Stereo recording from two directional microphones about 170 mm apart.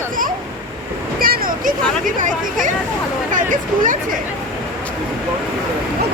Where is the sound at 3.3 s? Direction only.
50° right (ahead or behind).